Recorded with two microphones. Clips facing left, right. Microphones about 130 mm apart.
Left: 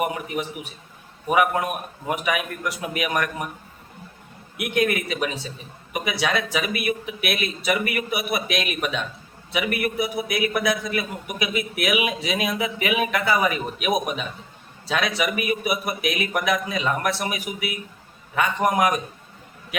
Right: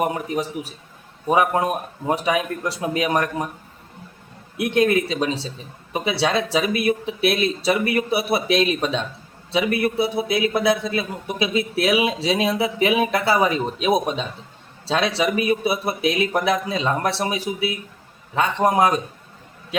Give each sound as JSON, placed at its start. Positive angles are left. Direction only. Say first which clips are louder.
{"t": 0.0, "sound": "a man's voice", "louder": "right 3 dB", "side_deg": -35}
{"t": 4.5, "sound": "a man's voice", "louder": "right 4 dB", "side_deg": -30}